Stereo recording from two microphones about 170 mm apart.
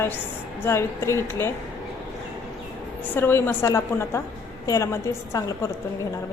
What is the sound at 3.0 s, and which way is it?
A woman's voice, 10° left (ahead or behind).